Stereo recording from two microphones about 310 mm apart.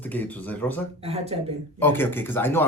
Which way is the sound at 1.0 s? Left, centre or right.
Centre.